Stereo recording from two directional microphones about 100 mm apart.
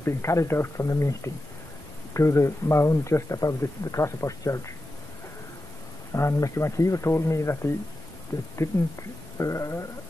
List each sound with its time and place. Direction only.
0.0 s speech: 30° left (ahead or behind)
6.1 s speech: 30° left (ahead or behind)